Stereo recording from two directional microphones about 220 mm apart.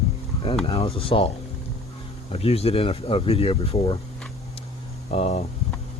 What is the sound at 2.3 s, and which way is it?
Speech, 25° left (ahead or behind).